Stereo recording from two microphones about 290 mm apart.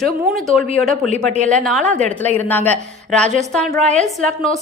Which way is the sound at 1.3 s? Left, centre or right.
Right.